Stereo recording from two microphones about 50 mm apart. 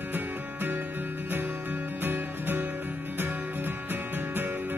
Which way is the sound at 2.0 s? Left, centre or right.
Right.